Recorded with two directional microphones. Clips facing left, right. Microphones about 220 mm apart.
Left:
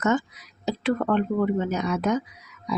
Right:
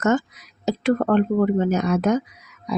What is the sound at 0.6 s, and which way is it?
Speech, 45° right (ahead or behind).